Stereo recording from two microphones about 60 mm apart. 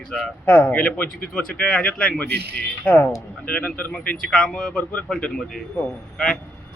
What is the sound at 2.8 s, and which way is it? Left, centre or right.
Speech, left.